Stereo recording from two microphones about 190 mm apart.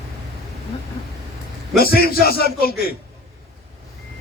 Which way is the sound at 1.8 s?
55° left (ahead or behind).